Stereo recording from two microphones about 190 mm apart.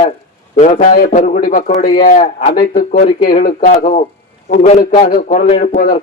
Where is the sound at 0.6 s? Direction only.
40° left (ahead or behind).